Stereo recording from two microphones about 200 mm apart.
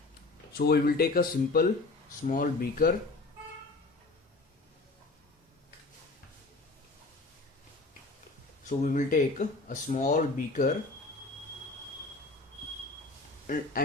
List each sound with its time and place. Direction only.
0.5 s speech: 50° left (ahead or behind)
8.8 s speech: 40° left (ahead or behind)
13.5 s speech: 40° left (ahead or behind)